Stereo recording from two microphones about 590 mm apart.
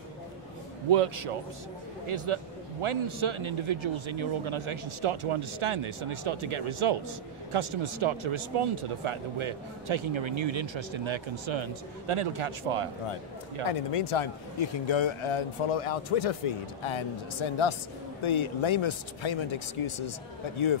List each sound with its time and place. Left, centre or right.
0.8 s a man's voice: right
13.7 s a man's voice: left
16.8 s speech: left